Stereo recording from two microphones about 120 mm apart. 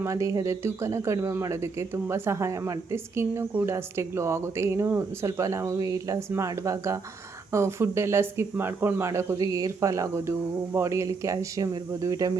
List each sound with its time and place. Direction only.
0.0 s speech: 25° right (ahead or behind)